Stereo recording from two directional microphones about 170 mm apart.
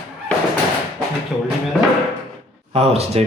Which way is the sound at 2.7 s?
35° right (ahead or behind).